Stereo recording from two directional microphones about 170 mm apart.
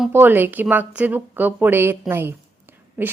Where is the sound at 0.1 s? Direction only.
10° right (ahead or behind).